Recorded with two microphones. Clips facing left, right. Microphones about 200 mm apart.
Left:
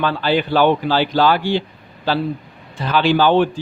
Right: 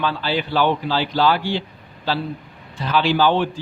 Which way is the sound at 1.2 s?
50° left (ahead or behind).